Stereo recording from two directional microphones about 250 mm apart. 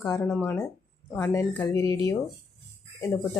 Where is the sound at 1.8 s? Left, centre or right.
Right.